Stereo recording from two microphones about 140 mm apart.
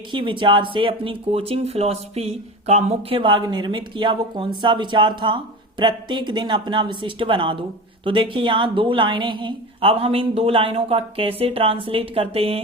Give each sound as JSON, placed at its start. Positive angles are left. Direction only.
{"t": 0.1, "sound": "speech", "side_deg": -35}